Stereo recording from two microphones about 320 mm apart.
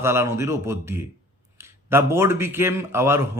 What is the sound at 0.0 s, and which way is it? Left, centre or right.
A man's voice, centre.